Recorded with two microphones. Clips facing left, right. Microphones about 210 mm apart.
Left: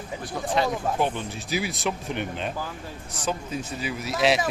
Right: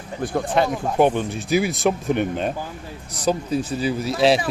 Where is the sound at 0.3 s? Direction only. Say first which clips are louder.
Right 4 dB; 55° right (ahead or behind).